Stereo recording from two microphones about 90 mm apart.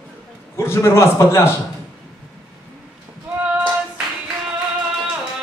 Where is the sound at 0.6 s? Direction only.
30° left (ahead or behind).